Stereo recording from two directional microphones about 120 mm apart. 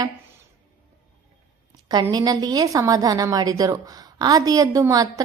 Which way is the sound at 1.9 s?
35° right (ahead or behind).